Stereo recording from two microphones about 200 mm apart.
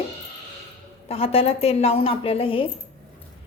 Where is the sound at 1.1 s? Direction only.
30° left (ahead or behind).